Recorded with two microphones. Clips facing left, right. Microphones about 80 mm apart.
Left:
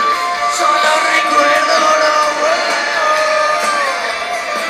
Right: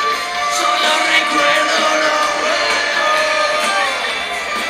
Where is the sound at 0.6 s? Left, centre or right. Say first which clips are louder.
Left 4 dB; left.